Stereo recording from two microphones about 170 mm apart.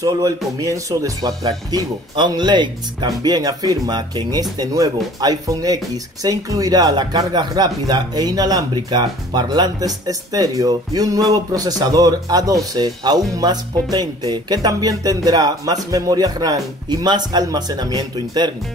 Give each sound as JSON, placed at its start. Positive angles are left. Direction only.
{"t": 0.6, "sound": "speech", "side_deg": -20}